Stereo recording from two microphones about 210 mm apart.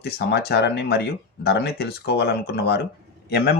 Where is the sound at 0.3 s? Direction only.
50° left (ahead or behind).